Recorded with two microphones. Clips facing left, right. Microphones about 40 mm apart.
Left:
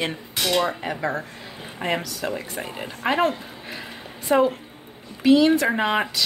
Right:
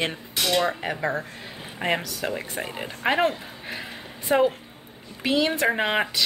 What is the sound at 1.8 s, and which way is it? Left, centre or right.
Speech, centre.